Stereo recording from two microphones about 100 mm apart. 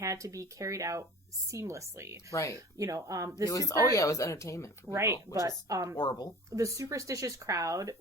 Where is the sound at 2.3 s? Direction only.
30° left (ahead or behind).